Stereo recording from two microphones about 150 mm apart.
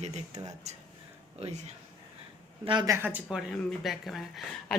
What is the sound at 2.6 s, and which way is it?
Speech, 35° right (ahead or behind).